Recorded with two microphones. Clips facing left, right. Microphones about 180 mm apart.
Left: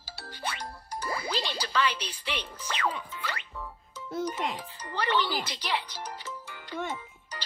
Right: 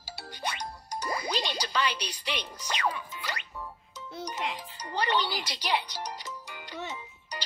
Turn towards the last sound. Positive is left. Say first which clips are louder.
# right 3 dB
turn(degrees=-15)  # may be behind; listen again after turning